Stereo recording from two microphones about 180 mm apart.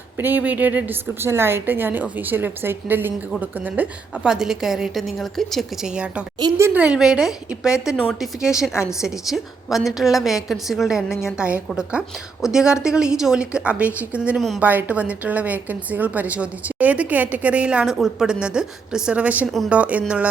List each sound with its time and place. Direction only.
0.2 s a woman's voice: 10° right (ahead or behind)
6.4 s a woman's voice: 25° right (ahead or behind)
6.7 s a woman's voice: 5° right (ahead or behind)